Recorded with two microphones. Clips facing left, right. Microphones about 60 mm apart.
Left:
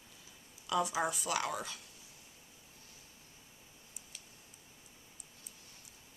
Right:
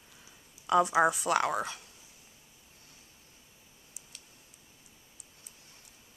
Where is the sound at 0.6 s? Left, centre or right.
Right.